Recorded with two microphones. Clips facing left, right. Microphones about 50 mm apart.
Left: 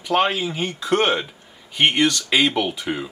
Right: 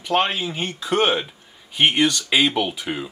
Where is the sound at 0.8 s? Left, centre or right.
Centre.